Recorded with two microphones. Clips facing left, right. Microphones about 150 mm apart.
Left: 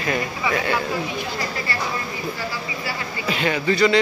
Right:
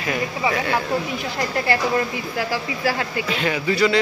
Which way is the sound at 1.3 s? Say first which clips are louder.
Right 5 dB; 65° right (ahead or behind).